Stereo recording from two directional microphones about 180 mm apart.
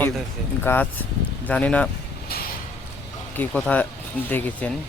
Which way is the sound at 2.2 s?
60° left (ahead or behind).